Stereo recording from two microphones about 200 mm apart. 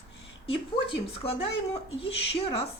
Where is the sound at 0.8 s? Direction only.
25° left (ahead or behind).